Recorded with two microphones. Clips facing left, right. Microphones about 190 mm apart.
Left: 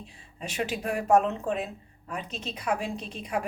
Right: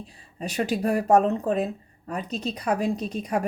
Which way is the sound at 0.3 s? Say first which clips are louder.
Right 5 dB; 40° right (ahead or behind).